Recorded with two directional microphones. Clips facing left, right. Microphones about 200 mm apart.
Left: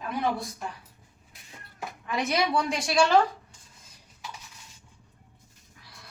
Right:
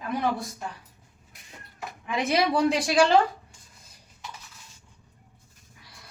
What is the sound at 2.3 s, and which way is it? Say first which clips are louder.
Speech: right 5 dB; 35° right (ahead or behind).